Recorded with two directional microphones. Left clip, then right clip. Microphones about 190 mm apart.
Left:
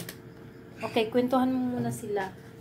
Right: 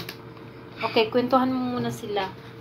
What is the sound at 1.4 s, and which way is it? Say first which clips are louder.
Speech: right 3 dB; 15° left (ahead or behind).